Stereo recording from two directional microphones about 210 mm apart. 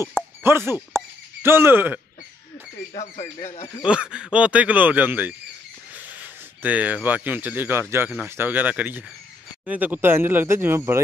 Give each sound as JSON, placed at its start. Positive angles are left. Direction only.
{"t": 0.4, "sound": "speech", "side_deg": -10}
{"t": 2.9, "sound": "speech", "side_deg": 30}
{"t": 3.8, "sound": "speech", "side_deg": -5}